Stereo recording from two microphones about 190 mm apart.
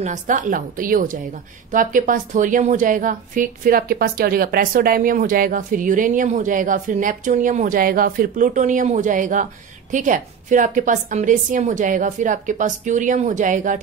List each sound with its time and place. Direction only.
0.0 s a woman's voice: 40° right (ahead or behind)